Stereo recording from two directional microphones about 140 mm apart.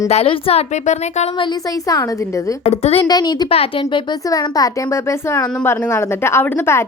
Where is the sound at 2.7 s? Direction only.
50° left (ahead or behind).